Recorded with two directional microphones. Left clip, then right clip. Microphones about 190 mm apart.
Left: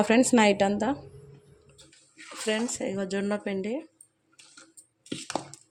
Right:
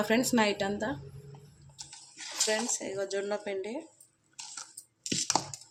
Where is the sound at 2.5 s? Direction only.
45° left (ahead or behind).